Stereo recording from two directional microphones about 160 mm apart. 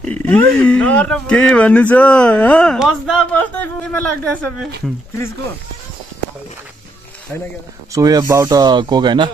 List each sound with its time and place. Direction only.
0.0 s speech: 10° left (ahead or behind)
7.9 s speech: 25° right (ahead or behind)